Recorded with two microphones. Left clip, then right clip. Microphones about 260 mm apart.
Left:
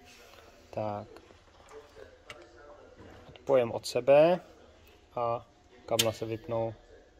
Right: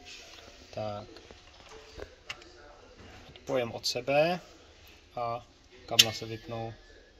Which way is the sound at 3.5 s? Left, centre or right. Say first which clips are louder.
Left 4 dB; centre.